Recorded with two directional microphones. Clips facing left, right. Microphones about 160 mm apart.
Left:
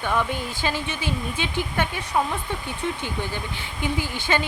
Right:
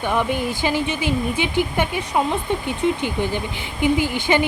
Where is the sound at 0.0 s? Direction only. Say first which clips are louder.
Right 4 dB; 15° right (ahead or behind).